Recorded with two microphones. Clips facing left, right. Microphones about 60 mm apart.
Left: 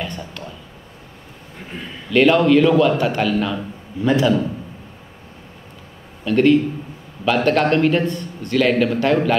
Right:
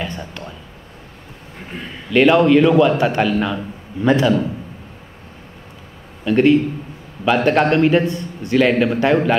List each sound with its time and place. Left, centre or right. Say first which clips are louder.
0.3 s a sound: right 1 dB; centre
1.7 s a man's voice: right 1 dB; centre
6.2 s a man's voice: right 1 dB; centre